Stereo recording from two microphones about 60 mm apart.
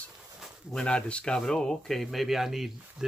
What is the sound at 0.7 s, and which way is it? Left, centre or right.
Speech, centre.